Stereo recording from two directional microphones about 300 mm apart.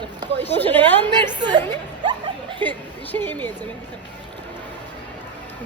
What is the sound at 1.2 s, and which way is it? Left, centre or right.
Speech, centre.